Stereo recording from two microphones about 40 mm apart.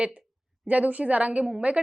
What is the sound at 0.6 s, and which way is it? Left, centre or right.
Speech, right.